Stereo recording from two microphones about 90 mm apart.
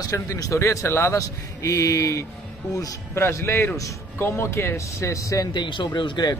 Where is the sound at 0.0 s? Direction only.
40° left (ahead or behind).